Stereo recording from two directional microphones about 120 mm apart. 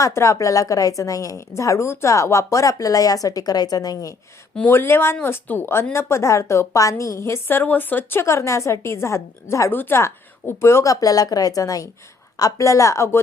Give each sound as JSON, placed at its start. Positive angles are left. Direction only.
{"t": 0.0, "sound": "a woman's voice", "side_deg": 25}
{"t": 4.5, "sound": "a woman's voice", "side_deg": 15}